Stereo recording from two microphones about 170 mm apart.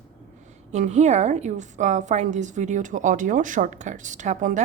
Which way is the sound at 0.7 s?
45° right (ahead or behind).